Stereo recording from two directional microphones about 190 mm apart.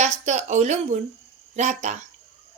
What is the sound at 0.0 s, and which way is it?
A woman's voice, 35° right (ahead or behind).